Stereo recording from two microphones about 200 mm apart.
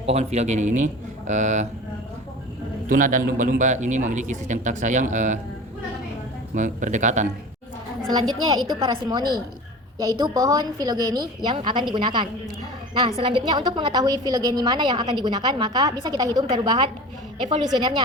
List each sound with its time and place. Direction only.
0.0 s a man's voice: 30° right (ahead or behind)
2.9 s a man's voice: 40° right (ahead or behind)
6.5 s a man's voice: 40° right (ahead or behind)
8.8 s a woman's voice: 20° right (ahead or behind)